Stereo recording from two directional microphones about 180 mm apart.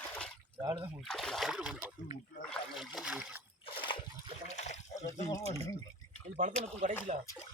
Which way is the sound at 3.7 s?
30° left (ahead or behind).